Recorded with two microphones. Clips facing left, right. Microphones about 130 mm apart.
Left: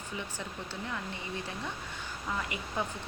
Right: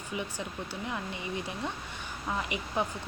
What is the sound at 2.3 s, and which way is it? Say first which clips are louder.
Speech: right 3 dB; 20° right (ahead or behind).